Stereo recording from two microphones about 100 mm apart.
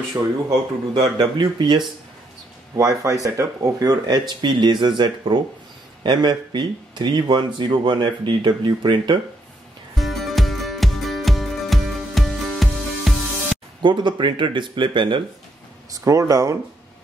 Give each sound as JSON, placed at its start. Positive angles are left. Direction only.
{"t": 1.1, "sound": "speech", "side_deg": -50}
{"t": 2.7, "sound": "speech", "side_deg": -35}
{"t": 9.9, "sound": "music", "side_deg": 0}
{"t": 13.8, "sound": "speech", "side_deg": -50}
{"t": 15.9, "sound": "speech", "side_deg": -35}